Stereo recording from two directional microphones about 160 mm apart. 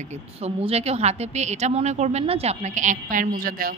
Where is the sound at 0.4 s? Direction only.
40° right (ahead or behind).